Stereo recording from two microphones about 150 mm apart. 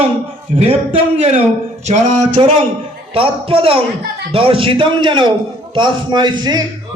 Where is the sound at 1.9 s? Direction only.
50° right (ahead or behind).